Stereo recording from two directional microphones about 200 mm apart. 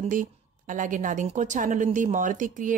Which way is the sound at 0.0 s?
40° right (ahead or behind).